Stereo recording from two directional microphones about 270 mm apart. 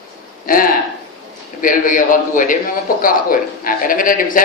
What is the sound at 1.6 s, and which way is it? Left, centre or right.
A man's voice, left.